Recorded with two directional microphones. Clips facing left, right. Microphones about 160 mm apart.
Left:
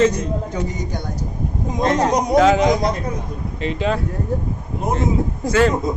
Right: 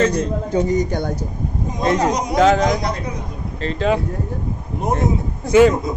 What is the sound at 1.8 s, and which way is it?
Speech, 10° right (ahead or behind).